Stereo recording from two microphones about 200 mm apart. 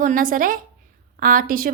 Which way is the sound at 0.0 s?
40° right (ahead or behind).